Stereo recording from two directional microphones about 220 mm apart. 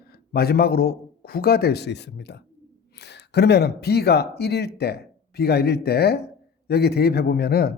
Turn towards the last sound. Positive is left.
turn(degrees=45)  # may be behind; listen again after turning